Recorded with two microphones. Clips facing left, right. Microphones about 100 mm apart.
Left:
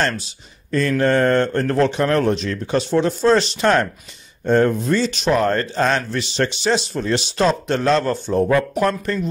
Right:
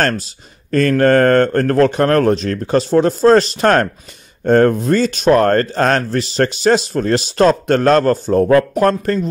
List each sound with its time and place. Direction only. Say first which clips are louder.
0.0 s speech: right 4 dB; 45° right (ahead or behind)
0.7 s speech: right 5 dB; 55° right (ahead or behind)
6.0 s speech: right 5 dB; 40° right (ahead or behind)